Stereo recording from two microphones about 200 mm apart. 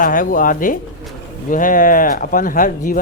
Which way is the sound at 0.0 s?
45° left (ahead or behind).